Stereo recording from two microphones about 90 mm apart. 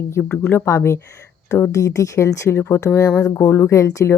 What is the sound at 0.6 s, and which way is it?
Speech, 30° left (ahead or behind).